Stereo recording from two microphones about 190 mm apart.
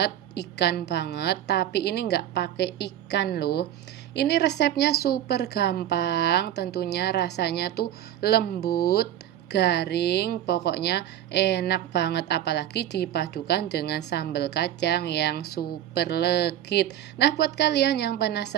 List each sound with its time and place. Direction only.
0.0 s speech: 60° left (ahead or behind)